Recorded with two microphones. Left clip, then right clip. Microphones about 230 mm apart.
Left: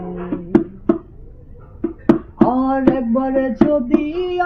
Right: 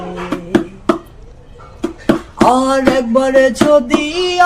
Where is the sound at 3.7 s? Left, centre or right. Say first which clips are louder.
Right 6 dB; right.